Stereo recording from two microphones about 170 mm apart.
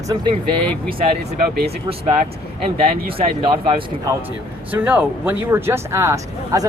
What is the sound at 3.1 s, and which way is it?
Speech, 30° right (ahead or behind).